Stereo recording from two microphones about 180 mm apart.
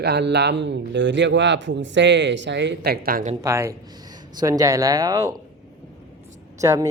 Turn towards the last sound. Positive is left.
turn(degrees=-20)  # may be behind; listen again after turning